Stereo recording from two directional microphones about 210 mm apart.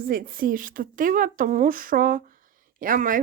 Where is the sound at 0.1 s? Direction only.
45° right (ahead or behind).